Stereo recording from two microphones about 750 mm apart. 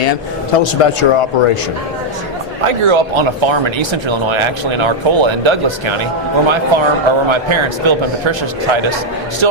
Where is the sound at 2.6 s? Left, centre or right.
Right.